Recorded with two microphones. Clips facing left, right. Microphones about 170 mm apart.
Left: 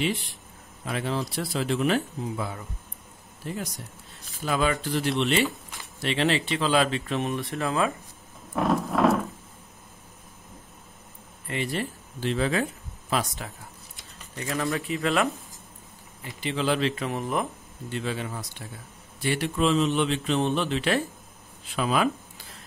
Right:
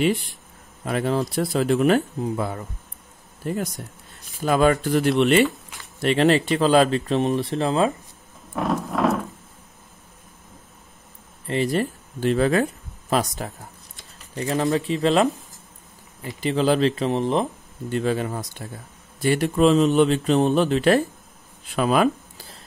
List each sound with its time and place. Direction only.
0.9 s speech: 45° right (ahead or behind); by 7.9 s 30° right (ahead or behind)
8.5 s a sound: centre (ahead or behind)
11.4 s speech: 35° right (ahead or behind)
16.3 s speech: 40° right (ahead or behind)
17.8 s speech: 45° right (ahead or behind)
21.7 s a sound: 45° right (ahead or behind)